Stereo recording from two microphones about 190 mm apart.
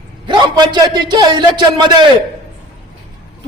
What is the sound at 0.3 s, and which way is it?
A man's voice, 20° right (ahead or behind).